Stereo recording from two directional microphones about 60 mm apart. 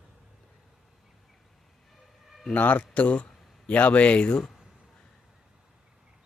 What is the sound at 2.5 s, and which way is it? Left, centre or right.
Speech, left.